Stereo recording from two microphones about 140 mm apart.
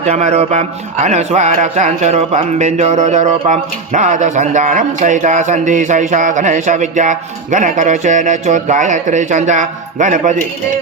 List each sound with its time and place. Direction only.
0.0 s speech: 55° right (ahead or behind)